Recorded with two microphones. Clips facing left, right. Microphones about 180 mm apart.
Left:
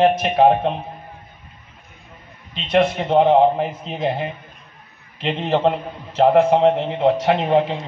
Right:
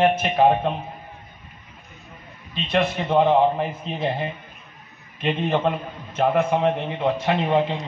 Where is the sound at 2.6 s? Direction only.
65° left (ahead or behind).